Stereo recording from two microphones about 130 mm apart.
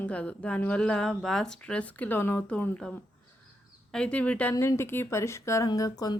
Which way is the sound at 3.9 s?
10° left (ahead or behind).